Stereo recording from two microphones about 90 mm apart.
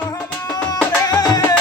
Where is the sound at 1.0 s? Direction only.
45° left (ahead or behind).